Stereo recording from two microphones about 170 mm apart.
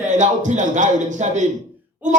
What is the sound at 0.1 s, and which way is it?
A woman's voice, 45° right (ahead or behind).